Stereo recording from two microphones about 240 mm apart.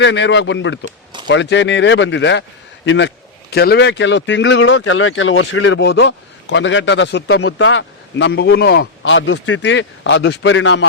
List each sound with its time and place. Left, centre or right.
0.0 s speech: left
0.9 s a sound: centre
1.3 s speech: left